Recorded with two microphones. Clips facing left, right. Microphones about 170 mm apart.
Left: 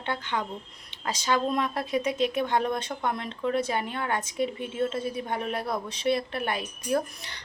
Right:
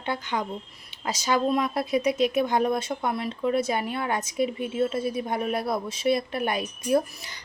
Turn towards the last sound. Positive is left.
turn(degrees=-10)  # may be behind; listen again after turning